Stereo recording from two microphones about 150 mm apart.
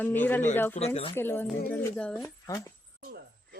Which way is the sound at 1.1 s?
15° left (ahead or behind).